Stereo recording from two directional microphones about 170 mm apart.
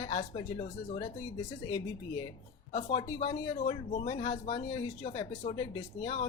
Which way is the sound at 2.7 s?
30° left (ahead or behind).